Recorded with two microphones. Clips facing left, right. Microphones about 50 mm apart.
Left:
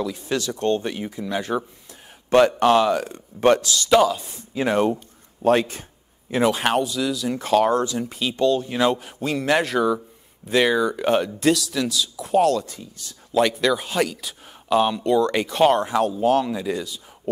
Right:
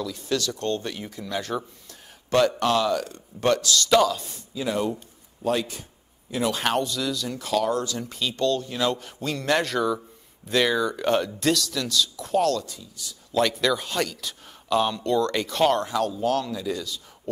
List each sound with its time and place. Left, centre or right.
0.0 s speech: left
3.9 s speech: centre
4.6 s speech: left
6.5 s speech: centre
6.8 s speech: centre
7.3 s speech: left
7.8 s speech: centre
12.6 s speech: left
13.3 s speech: centre